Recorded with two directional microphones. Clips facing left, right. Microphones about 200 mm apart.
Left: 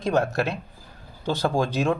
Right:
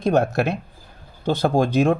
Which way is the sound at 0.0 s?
55° right (ahead or behind).